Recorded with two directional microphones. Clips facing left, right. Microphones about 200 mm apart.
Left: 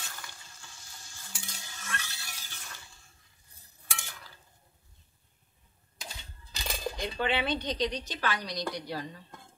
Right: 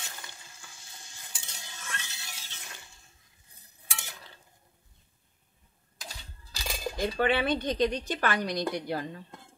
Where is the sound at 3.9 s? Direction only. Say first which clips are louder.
Right 1 dB; 20° right (ahead or behind).